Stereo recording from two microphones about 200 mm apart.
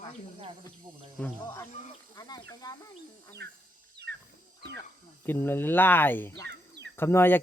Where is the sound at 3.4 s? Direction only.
50° right (ahead or behind).